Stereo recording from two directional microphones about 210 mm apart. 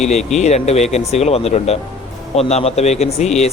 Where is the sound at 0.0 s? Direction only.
35° left (ahead or behind).